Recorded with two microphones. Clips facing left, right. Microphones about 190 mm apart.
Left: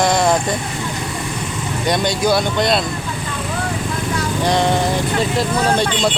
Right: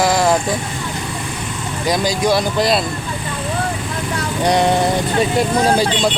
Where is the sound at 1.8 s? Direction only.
Centre (ahead or behind).